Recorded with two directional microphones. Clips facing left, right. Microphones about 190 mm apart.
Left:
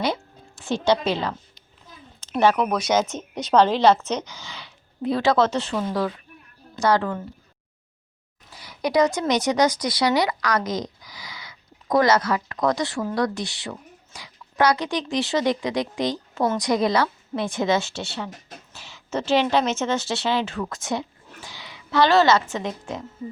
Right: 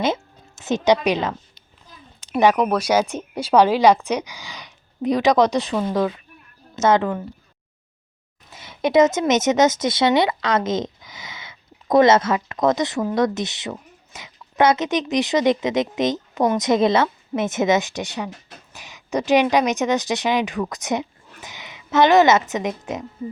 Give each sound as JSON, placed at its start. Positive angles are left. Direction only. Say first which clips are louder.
{"t": 0.6, "sound": "a woman's voice", "louder": "right 3 dB", "side_deg": -20}
{"t": 8.4, "sound": "speech", "louder": "right 4 dB", "side_deg": -25}